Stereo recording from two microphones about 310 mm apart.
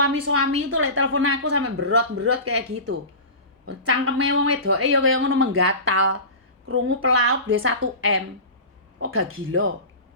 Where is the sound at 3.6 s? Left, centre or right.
Right.